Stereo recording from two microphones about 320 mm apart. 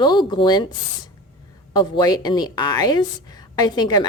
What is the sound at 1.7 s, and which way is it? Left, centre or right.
A woman's voice, centre.